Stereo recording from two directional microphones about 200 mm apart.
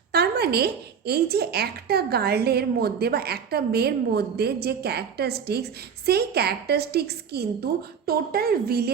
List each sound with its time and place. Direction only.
0.1 s speech: 55° right (ahead or behind)